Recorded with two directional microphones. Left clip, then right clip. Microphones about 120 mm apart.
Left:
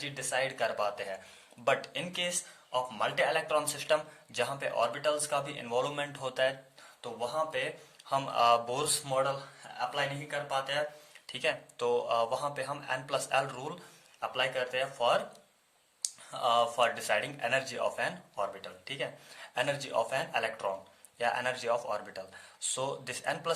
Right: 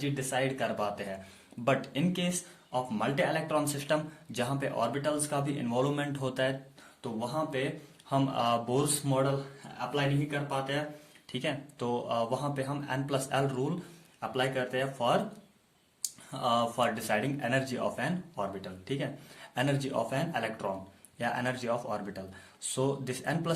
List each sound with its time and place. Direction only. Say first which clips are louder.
0.0 s speech: right 1 dB; 15° left (ahead or behind)
16.3 s speech: left 1 dB; 10° left (ahead or behind)